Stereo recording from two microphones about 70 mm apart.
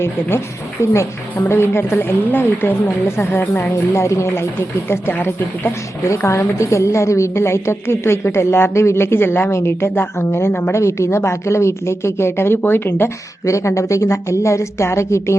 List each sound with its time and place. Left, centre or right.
0.8 s a woman's voice: left
3.9 s a woman's voice: left
6.1 s a woman's voice: left
13.4 s a woman's voice: left